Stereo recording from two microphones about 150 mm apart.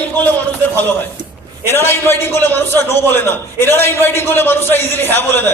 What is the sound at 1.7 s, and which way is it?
A man's voice, 15° left (ahead or behind).